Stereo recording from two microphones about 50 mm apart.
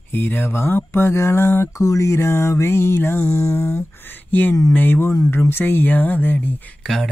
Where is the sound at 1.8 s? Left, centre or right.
Left.